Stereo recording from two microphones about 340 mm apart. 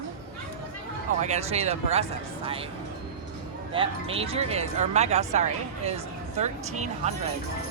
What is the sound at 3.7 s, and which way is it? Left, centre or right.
Speech, centre.